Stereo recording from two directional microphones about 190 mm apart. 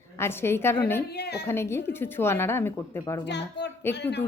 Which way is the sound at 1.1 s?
60° left (ahead or behind).